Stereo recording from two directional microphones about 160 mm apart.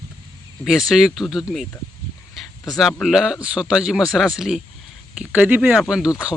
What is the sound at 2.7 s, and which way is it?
Speech, centre (ahead or behind).